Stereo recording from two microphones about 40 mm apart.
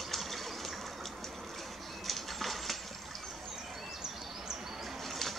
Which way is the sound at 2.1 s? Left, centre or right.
Centre.